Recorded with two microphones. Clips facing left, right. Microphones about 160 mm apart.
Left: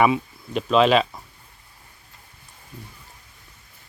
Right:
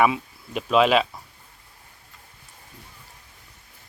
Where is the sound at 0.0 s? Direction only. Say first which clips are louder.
Left 2 dB; 5° right (ahead or behind).